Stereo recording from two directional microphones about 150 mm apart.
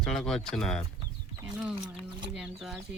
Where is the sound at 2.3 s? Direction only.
5° right (ahead or behind).